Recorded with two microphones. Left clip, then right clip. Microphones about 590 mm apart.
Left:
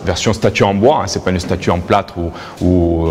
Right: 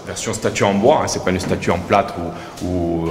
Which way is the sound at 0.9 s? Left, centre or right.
Left.